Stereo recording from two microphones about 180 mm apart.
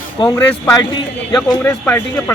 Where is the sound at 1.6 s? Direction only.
10° left (ahead or behind).